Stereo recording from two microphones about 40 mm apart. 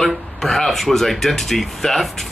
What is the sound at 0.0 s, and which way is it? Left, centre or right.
Speech, centre.